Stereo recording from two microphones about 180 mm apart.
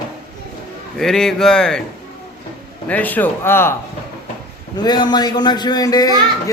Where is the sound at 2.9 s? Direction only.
10° left (ahead or behind).